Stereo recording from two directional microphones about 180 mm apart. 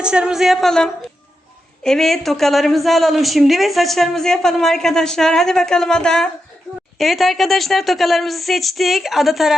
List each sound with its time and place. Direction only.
0.0 s a woman's voice: 5° right (ahead or behind)